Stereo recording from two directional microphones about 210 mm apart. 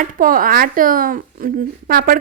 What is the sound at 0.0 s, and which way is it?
A woman's voice, 40° right (ahead or behind).